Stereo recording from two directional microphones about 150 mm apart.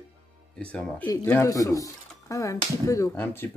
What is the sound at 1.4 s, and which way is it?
Speech, 20° left (ahead or behind).